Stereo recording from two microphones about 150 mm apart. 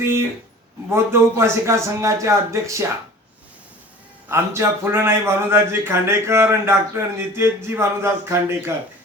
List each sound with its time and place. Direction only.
0.9 s a man's voice: 15° right (ahead or behind)
4.3 s a man's voice: 15° right (ahead or behind)